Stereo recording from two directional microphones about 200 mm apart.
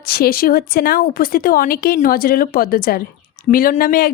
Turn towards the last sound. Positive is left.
turn(degrees=45)  # may be behind; listen again after turning